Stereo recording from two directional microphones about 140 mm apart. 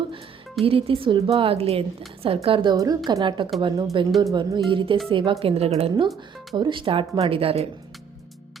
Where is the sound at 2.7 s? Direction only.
25° right (ahead or behind); by 6.1 s 45° right (ahead or behind).